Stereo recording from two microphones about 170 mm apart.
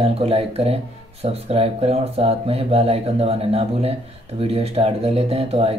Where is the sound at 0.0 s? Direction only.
35° right (ahead or behind).